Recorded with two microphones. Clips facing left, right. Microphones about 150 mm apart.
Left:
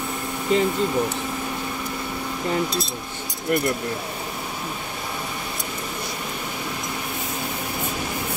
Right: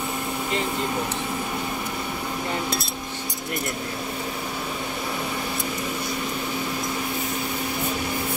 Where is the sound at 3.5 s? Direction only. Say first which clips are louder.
Left 9 dB; 50° left (ahead or behind).